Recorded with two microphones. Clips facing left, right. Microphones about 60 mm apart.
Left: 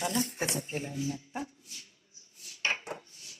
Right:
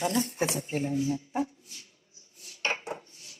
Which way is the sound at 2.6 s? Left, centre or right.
Right.